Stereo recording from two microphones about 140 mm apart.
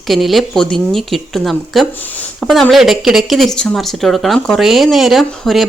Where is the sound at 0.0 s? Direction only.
Centre (ahead or behind).